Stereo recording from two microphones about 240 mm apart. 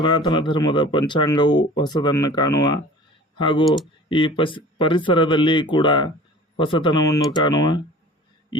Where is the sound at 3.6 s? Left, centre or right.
Centre.